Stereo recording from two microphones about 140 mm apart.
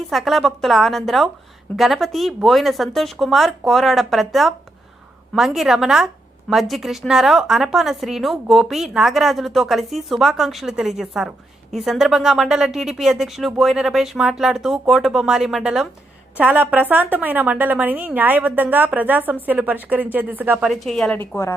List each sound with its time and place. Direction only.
0.1 s a woman's voice: centre (ahead or behind)
20.7 s a woman's voice: 5° left (ahead or behind)
21.2 s a woman's voice: 20° left (ahead or behind)